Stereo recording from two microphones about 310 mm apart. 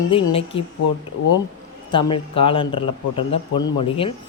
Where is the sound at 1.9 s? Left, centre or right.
Centre.